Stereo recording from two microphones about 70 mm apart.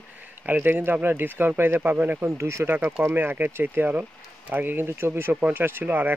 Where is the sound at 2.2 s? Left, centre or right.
Right.